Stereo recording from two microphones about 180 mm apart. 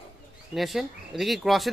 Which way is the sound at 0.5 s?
Centre (ahead or behind).